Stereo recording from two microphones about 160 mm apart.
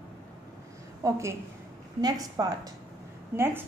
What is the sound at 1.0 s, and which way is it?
A woman's voice, 15° right (ahead or behind).